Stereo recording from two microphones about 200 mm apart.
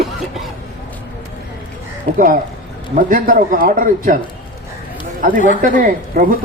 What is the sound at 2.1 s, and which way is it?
Speech, 45° right (ahead or behind).